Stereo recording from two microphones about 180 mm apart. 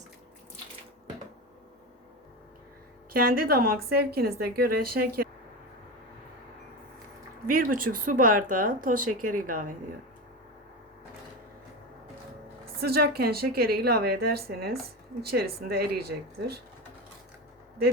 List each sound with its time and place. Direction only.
3.1 s a woman's voice: 55° right (ahead or behind)
7.4 s speech: 50° right (ahead or behind)
12.8 s a woman's voice: 60° right (ahead or behind)